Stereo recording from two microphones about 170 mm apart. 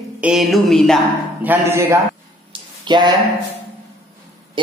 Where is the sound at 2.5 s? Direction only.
25° right (ahead or behind).